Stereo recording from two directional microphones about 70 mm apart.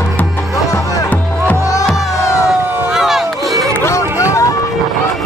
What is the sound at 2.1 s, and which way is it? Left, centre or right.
Music, left.